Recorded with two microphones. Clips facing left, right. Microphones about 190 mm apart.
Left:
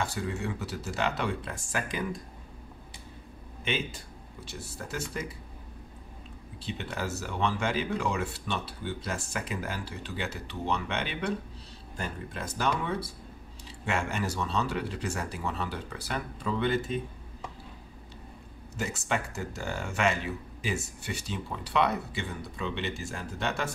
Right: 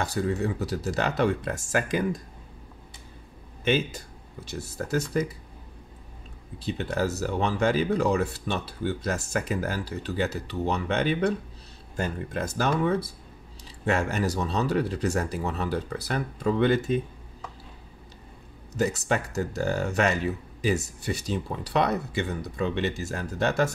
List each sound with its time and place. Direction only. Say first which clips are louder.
0.0 s speech: right 6 dB; 40° right (ahead or behind)
3.6 s speech: right 8 dB; 45° right (ahead or behind)
6.6 s speech: right 7 dB; 40° right (ahead or behind)
12.4 s speech: right 5 dB; 45° right (ahead or behind)
18.8 s speech: right 6 dB; 40° right (ahead or behind)